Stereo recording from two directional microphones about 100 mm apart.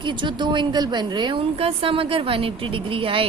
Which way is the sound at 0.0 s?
50° right (ahead or behind).